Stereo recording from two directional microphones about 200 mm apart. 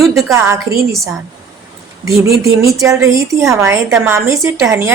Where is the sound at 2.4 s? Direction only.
15° right (ahead or behind).